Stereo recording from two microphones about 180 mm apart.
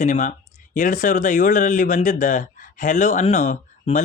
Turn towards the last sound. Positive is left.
turn(degrees=45)  # may be behind; listen again after turning